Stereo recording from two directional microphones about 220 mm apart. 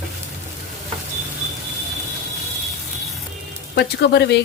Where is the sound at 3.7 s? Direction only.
50° left (ahead or behind).